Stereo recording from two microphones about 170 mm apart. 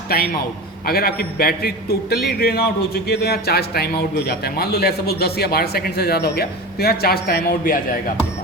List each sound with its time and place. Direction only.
0.9 s a man's voice: 60° left (ahead or behind)